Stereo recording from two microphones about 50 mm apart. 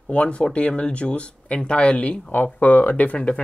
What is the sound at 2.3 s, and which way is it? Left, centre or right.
Speech, left.